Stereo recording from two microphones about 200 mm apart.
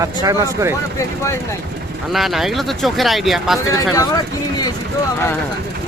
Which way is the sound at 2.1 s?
Centre (ahead or behind).